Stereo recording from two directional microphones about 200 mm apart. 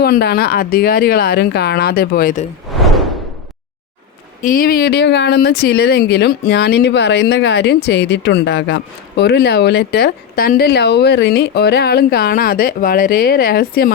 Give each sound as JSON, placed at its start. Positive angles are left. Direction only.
{"t": 0.0, "sound": "speech", "side_deg": 55}
{"t": 2.7, "sound": "whoosh", "side_deg": 0}
{"t": 4.4, "sound": "speech", "side_deg": 45}